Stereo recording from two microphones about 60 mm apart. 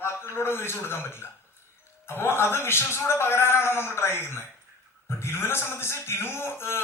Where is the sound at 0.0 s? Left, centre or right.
Left.